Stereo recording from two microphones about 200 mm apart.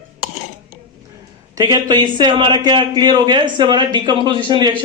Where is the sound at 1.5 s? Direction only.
20° right (ahead or behind).